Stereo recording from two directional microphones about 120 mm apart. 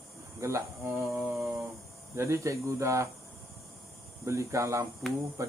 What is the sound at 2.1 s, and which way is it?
Speech, 25° right (ahead or behind).